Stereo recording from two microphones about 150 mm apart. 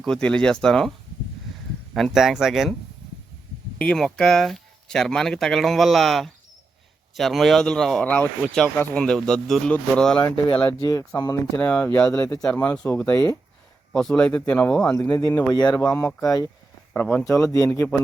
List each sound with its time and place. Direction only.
0.0 s speech: 5° left (ahead or behind)
3.8 s speech: 5° left (ahead or behind)
10.8 s speech: 25° left (ahead or behind)
11.5 s speech: 10° left (ahead or behind)
15.5 s speech: 30° left (ahead or behind)
16.9 s speech: 10° left (ahead or behind)